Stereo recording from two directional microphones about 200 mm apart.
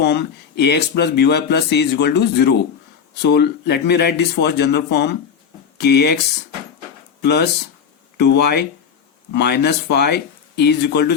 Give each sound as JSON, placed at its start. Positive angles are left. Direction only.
{"t": 0.0, "sound": "speech", "side_deg": 55}
{"t": 7.2, "sound": "speech", "side_deg": 55}